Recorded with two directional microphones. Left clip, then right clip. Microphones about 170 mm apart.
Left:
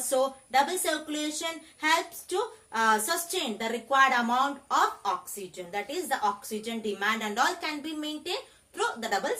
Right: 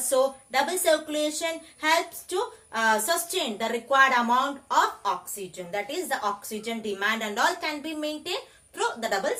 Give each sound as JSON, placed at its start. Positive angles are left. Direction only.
{"t": 0.1, "sound": "a woman's voice", "side_deg": 5}